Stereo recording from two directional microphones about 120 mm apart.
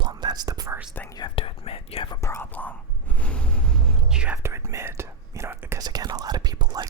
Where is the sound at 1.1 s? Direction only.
45° left (ahead or behind).